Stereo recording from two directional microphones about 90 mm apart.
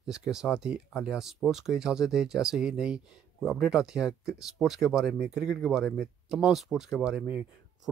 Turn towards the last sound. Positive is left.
turn(degrees=-15)  # may be behind; listen again after turning